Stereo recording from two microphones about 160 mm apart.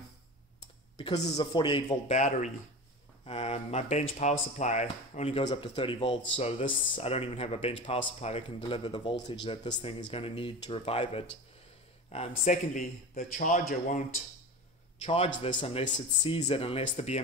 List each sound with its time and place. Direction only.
0.9 s speech: 35° left (ahead or behind)
2.0 s a man's voice: 50° left (ahead or behind); by 9.8 s 25° left (ahead or behind)
9.8 s a man's voice: 40° left (ahead or behind)
15.0 s a man's voice: 40° left (ahead or behind)